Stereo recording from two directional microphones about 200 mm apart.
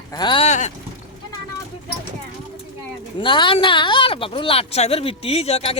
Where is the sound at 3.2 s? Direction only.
25° left (ahead or behind).